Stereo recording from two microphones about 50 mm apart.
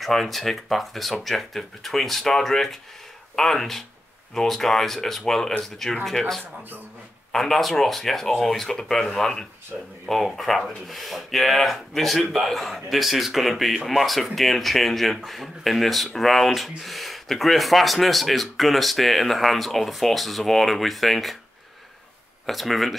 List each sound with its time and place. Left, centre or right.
0.0 s speech: centre
9.7 s speech: right
10.0 s speech: centre
22.5 s speech: centre